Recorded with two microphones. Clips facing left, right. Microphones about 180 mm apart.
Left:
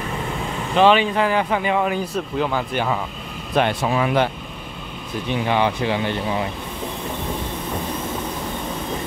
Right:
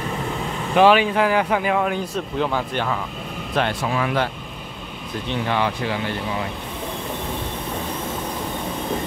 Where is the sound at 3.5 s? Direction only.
20° left (ahead or behind).